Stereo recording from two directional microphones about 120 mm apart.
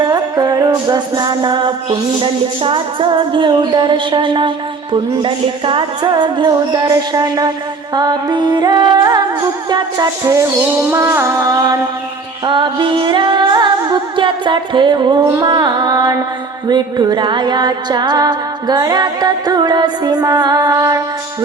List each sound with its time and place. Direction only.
0.0 s music: 35° right (ahead or behind)
10.9 s music: 25° right (ahead or behind)
12.5 s music: 45° right (ahead or behind); by 21.0 s 25° right (ahead or behind)